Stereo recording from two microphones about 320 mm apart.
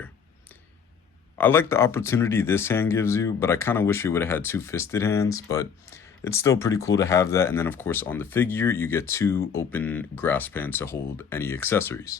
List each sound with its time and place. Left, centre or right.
1.4 s speech: centre